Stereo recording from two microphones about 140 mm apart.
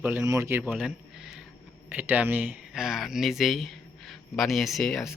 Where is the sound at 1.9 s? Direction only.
10° right (ahead or behind).